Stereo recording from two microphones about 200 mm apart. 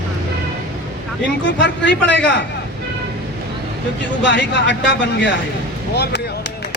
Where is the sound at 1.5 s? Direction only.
65° left (ahead or behind).